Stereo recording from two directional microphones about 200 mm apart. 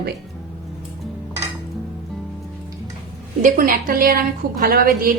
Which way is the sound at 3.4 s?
45° right (ahead or behind).